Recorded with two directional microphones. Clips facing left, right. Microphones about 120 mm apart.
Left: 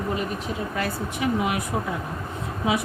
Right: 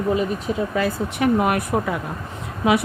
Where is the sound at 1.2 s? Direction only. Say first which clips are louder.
Right 6 dB; 55° right (ahead or behind).